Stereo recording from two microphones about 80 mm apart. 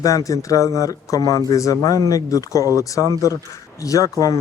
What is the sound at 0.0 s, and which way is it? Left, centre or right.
Speech, left.